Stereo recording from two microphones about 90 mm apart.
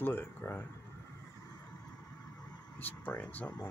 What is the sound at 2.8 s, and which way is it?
Speech, 20° left (ahead or behind).